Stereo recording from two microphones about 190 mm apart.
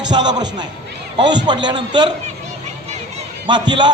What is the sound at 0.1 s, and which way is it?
A man's voice, 20° right (ahead or behind).